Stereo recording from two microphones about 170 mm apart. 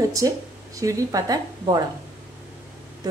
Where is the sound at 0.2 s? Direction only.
20° right (ahead or behind).